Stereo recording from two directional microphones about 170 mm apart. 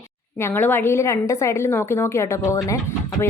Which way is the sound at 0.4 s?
10° left (ahead or behind).